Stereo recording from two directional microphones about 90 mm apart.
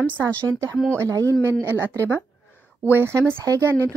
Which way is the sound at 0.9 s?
35° right (ahead or behind).